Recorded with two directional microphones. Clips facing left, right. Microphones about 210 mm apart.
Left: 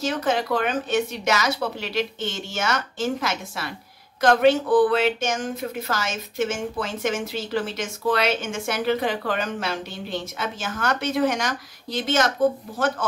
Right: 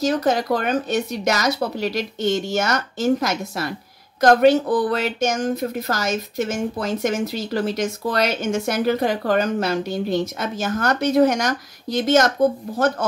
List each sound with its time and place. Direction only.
0.0 s a woman's voice: 40° right (ahead or behind)